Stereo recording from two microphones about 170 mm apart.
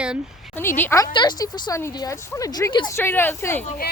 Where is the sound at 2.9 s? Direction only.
15° left (ahead or behind).